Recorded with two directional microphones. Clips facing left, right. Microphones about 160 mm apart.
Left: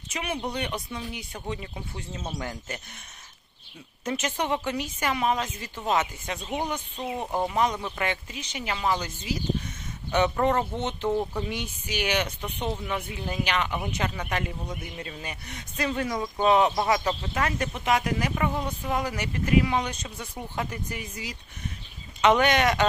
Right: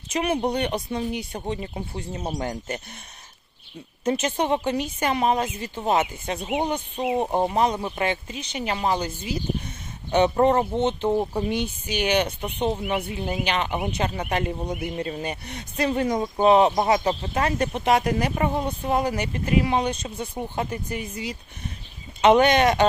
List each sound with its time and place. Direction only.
0.1 s speech: 40° right (ahead or behind)
4.0 s speech: 30° right (ahead or behind)
6.9 s speech: 15° right (ahead or behind)
7.2 s speech: 30° right (ahead or behind)